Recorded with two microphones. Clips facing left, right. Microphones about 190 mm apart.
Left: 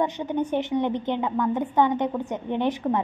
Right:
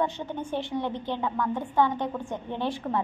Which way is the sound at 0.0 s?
15° left (ahead or behind).